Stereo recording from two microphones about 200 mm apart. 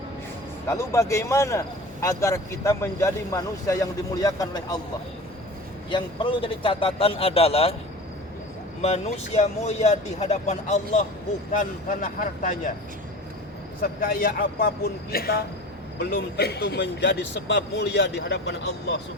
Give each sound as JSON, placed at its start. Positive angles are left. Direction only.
{"t": 0.7, "sound": "speech", "side_deg": 15}
{"t": 5.9, "sound": "a man's voice", "side_deg": 25}
{"t": 8.8, "sound": "speech", "side_deg": 30}
{"t": 13.8, "sound": "a man's voice", "side_deg": 45}